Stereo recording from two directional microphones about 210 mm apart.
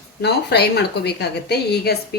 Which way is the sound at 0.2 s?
50° left (ahead or behind).